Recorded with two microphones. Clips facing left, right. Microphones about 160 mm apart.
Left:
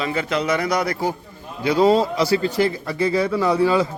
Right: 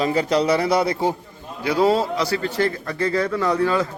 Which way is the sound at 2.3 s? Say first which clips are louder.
Left 3 dB; 10° left (ahead or behind).